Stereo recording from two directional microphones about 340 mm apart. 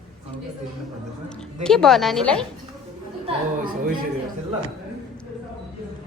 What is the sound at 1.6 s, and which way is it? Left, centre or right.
Speech, centre.